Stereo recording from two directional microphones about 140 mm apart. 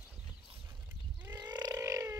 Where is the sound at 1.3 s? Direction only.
30° right (ahead or behind).